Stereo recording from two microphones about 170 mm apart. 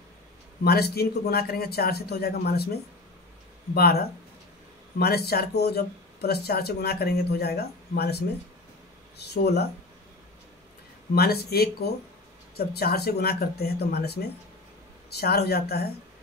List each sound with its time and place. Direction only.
0.7 s speech: 65° left (ahead or behind)
9.2 s speech: 70° left (ahead or behind)
11.1 s speech: 65° left (ahead or behind)